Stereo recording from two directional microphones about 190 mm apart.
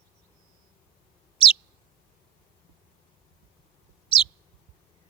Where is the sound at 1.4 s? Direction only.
30° left (ahead or behind).